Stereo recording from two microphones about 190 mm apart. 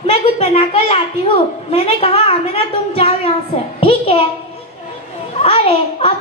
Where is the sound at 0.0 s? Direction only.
30° left (ahead or behind).